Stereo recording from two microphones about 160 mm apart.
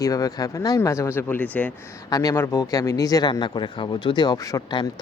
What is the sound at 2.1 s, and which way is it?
Speech, 20° left (ahead or behind).